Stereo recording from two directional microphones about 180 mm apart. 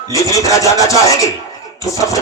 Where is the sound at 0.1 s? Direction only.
20° left (ahead or behind).